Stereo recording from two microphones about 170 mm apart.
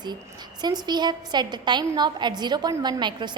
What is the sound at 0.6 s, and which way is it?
A woman's voice, 25° right (ahead or behind).